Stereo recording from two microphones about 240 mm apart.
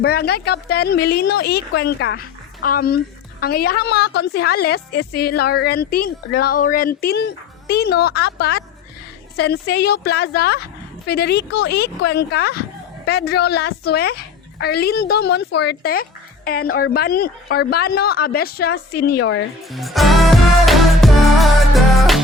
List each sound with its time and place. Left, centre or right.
0.0 s a woman's voice: left
19.6 s music: centre